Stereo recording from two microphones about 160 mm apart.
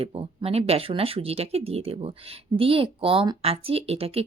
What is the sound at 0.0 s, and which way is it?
Speech, 40° right (ahead or behind).